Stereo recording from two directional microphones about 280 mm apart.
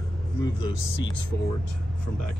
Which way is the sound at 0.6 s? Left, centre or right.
Centre.